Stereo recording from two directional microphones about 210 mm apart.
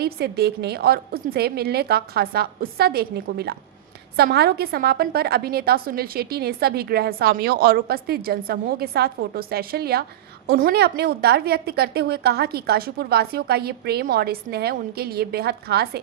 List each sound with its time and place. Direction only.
0.0 s a woman's voice: 50° right (ahead or behind)